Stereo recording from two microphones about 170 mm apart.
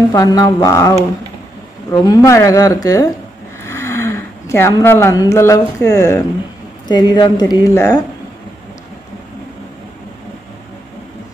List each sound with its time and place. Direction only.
0.1 s a woman's voice: 20° left (ahead or behind)